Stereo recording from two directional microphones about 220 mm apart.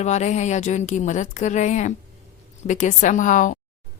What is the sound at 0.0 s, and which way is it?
A woman's voice, 30° left (ahead or behind).